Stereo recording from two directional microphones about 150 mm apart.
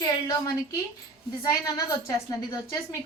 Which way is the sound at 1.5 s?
25° left (ahead or behind).